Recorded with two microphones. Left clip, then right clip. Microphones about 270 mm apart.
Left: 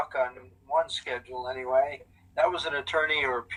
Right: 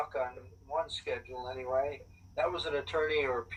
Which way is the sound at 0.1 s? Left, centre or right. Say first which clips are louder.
Left 7 dB; left.